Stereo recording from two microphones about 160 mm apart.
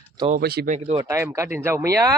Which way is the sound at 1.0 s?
20° right (ahead or behind).